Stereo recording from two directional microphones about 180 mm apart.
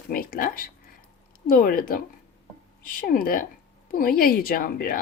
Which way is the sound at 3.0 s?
50° left (ahead or behind).